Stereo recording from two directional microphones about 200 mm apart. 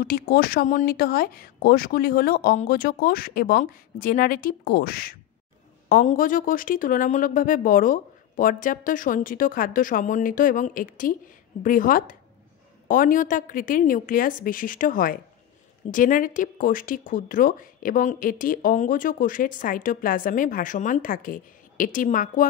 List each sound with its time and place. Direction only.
0.0 s speech: 45° left (ahead or behind)